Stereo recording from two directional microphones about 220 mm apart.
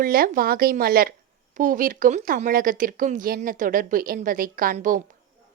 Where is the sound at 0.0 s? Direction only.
40° right (ahead or behind).